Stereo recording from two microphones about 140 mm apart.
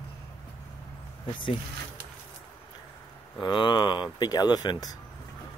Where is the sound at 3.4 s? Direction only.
35° left (ahead or behind).